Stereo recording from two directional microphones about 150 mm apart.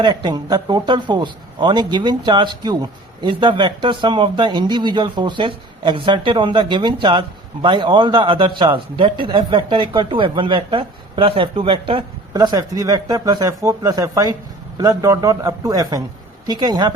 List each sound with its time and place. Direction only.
0.0 s a man's voice: 30° right (ahead or behind)